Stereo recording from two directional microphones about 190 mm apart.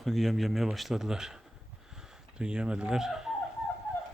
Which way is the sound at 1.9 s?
5° right (ahead or behind).